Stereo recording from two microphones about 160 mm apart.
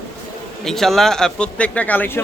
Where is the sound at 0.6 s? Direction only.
Centre (ahead or behind).